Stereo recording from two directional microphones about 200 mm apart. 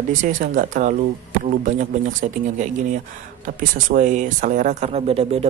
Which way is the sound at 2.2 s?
40° right (ahead or behind).